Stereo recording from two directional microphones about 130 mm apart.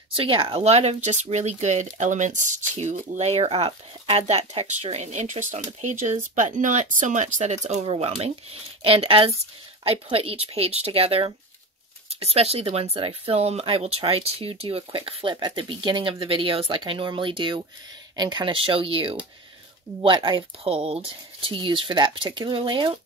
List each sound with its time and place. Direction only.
0.1 s speech: 45° right (ahead or behind); by 7.9 s 60° right (ahead or behind)
7.9 s speech: 50° right (ahead or behind)